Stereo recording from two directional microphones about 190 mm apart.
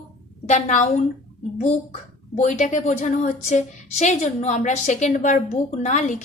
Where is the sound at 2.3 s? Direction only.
40° left (ahead or behind).